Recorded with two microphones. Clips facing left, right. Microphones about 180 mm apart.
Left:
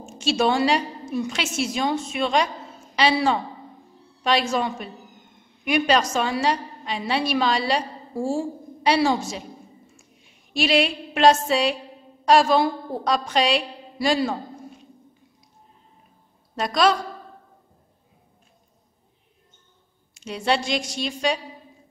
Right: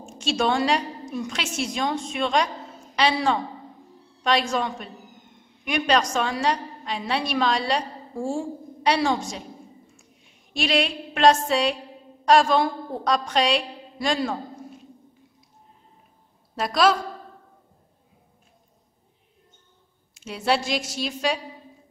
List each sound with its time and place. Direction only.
0.0 s a woman's voice: 5° left (ahead or behind)
10.5 s a sound: 5° left (ahead or behind)
12.3 s a woman's voice: 5° left (ahead or behind)
16.5 s a woman's voice: centre (ahead or behind)
20.2 s a woman's voice: 5° right (ahead or behind)